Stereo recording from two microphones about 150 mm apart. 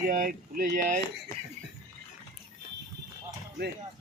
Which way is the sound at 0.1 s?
70° right (ahead or behind).